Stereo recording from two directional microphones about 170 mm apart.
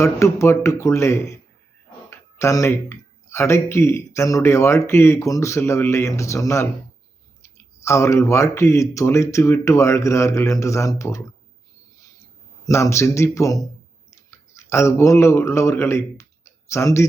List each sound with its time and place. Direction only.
0.0 s speech: 15° left (ahead or behind)
12.6 s speech: 15° left (ahead or behind)